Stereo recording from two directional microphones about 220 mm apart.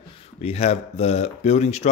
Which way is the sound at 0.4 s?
30° left (ahead or behind).